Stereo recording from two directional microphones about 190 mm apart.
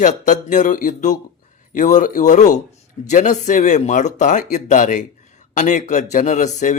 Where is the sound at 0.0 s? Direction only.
40° left (ahead or behind).